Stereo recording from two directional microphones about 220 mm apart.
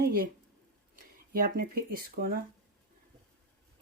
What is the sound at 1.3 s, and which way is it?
Speech, 40° right (ahead or behind).